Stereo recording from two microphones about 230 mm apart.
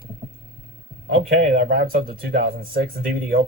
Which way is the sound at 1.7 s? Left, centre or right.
Right.